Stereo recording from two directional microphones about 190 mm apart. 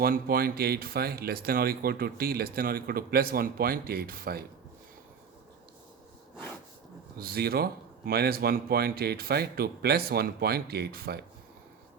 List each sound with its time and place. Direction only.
0.0 s speech: 50° right (ahead or behind)
7.2 s speech: 55° right (ahead or behind)